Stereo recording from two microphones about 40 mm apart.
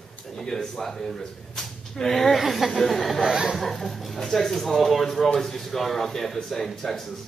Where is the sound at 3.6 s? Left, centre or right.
Centre.